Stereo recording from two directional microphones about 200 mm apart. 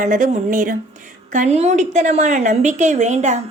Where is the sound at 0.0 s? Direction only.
40° right (ahead or behind).